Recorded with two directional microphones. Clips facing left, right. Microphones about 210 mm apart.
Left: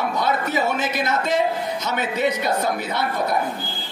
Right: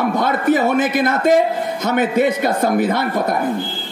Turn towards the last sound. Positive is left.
turn(degrees=-50)  # may be behind; listen again after turning